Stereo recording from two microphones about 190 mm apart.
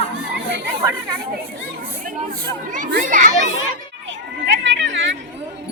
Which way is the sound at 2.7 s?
45° right (ahead or behind).